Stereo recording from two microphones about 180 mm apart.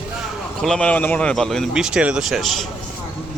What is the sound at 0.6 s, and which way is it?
Speech, 5° left (ahead or behind).